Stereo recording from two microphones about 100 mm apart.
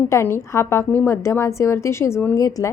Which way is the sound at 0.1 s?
25° left (ahead or behind).